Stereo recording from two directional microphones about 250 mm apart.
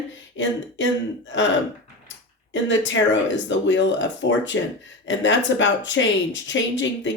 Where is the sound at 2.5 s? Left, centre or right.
Left.